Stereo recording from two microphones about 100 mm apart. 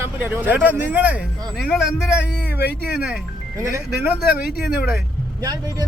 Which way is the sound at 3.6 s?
25° right (ahead or behind).